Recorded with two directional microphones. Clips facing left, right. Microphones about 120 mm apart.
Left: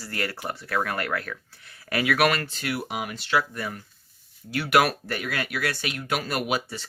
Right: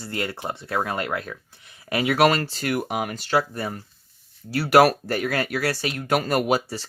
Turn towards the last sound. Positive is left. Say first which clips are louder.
# right 5 dB
turn(degrees=-40)  # may be behind; listen again after turning